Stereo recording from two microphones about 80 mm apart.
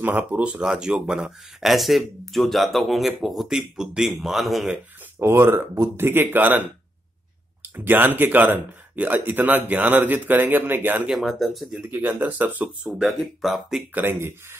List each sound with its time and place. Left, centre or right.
0.0 s speech: centre
5.2 s speech: right
7.6 s speech: right
11.1 s speech: centre
11.9 s speech: right
13.0 s speech: centre
13.9 s speech: right